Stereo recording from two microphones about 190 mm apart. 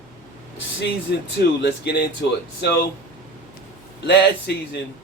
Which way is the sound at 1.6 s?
60° left (ahead or behind).